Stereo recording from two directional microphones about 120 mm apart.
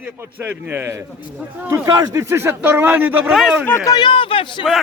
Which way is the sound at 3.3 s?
5° right (ahead or behind).